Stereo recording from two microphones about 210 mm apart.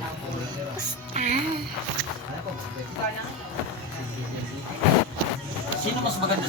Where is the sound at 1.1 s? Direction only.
35° right (ahead or behind).